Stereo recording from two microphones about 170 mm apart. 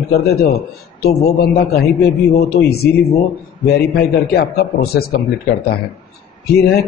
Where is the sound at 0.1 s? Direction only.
70° left (ahead or behind).